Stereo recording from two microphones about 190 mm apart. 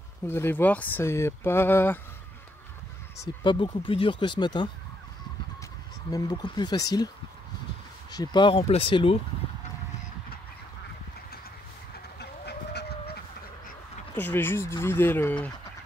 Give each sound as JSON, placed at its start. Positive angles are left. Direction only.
{"t": 0.3, "sound": "speech", "side_deg": 10}
{"t": 3.4, "sound": "speech", "side_deg": 25}
{"t": 6.0, "sound": "speech", "side_deg": 20}
{"t": 8.1, "sound": "speech", "side_deg": 20}
{"t": 12.2, "sound": "duck", "side_deg": 60}
{"t": 14.1, "sound": "speech", "side_deg": 10}